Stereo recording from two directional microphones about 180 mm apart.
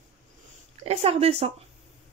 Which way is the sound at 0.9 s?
35° right (ahead or behind).